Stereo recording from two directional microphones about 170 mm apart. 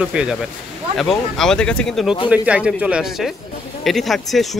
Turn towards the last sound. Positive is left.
turn(degrees=0)  # may be behind; listen again after turning